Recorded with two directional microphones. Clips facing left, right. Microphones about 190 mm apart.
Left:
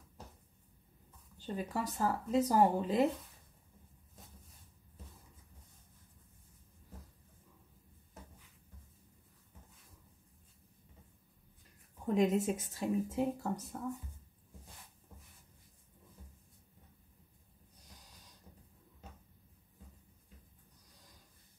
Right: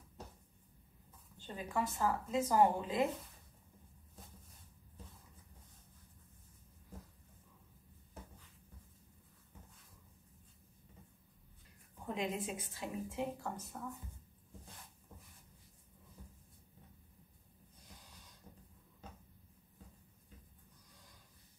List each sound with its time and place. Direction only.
1.4 s speech: 40° left (ahead or behind)
12.1 s speech: 45° left (ahead or behind)